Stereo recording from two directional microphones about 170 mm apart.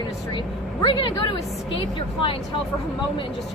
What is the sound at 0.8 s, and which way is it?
Speech, 30° left (ahead or behind).